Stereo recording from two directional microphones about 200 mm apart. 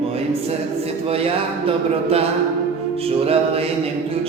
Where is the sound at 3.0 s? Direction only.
30° right (ahead or behind).